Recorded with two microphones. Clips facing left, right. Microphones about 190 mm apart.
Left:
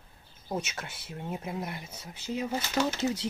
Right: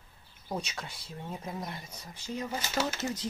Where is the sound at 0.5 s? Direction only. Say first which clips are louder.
Left 2 dB; 5° left (ahead or behind).